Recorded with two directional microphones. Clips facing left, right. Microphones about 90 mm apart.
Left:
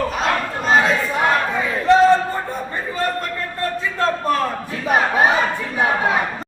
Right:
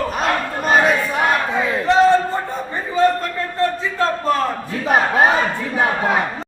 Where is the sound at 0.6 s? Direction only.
55° right (ahead or behind).